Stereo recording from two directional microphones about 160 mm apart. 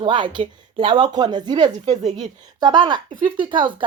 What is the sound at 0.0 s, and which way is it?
Speech, 30° right (ahead or behind).